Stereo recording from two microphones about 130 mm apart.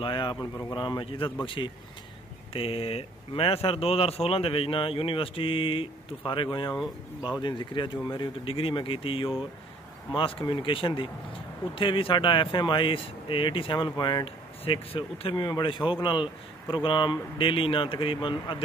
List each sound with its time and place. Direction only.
0.0 s speech: 40° left (ahead or behind)
7.2 s speech: 10° right (ahead or behind)
7.4 s speech: 35° left (ahead or behind)
14.6 s speech: 45° left (ahead or behind)